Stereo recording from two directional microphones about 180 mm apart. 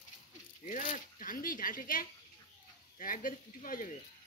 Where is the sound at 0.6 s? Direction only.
45° left (ahead or behind).